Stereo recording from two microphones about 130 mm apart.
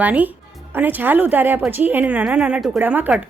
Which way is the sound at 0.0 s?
10° right (ahead or behind).